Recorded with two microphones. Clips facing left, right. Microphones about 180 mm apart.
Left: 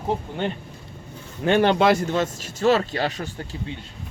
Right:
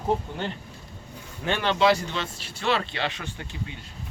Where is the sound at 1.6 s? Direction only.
55° left (ahead or behind).